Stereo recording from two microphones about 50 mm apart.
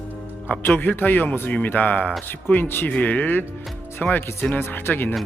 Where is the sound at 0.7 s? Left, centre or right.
Left.